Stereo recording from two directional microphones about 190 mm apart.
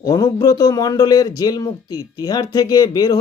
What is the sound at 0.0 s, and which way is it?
Speech, 20° left (ahead or behind).